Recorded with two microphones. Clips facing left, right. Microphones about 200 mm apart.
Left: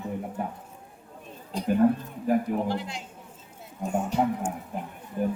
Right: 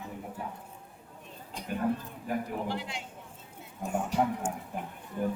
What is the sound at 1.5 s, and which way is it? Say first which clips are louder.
Speech: left 9 dB; 35° left (ahead or behind).